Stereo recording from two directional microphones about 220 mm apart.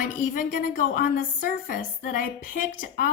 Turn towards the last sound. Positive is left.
turn(degrees=40)  # may be behind; listen again after turning